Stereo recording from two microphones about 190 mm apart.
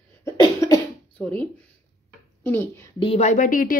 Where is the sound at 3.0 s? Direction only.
35° left (ahead or behind).